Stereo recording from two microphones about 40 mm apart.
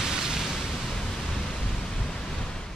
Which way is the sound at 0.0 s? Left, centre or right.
Centre.